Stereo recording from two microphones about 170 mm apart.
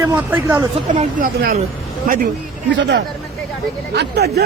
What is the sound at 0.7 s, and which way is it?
Speech, 35° right (ahead or behind).